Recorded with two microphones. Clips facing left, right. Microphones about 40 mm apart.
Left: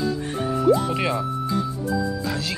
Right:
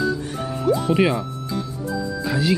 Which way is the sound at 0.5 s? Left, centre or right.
Centre.